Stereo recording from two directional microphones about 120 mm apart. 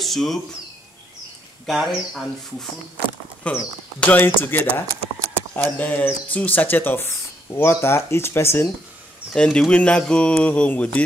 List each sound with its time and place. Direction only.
0.0 s speech: centre (ahead or behind)
1.7 s speech: centre (ahead or behind)
3.4 s speech: 10° left (ahead or behind)
9.3 s speech: 5° left (ahead or behind)